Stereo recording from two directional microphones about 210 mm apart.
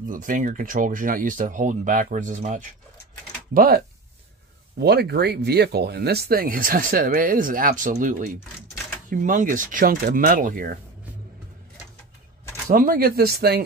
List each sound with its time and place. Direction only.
0.1 s speech: 40° right (ahead or behind)
3.5 s speech: 50° right (ahead or behind)
12.6 s speech: 40° right (ahead or behind)